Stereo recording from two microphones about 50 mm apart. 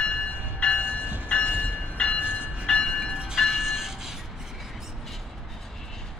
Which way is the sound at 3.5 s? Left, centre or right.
Centre.